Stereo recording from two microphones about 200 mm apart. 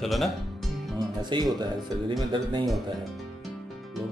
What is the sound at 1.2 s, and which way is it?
A man's voice, 20° right (ahead or behind).